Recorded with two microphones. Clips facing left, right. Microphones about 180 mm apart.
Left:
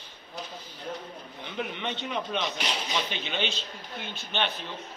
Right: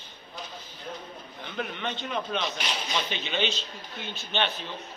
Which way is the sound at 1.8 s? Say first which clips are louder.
Even; 20° left (ahead or behind).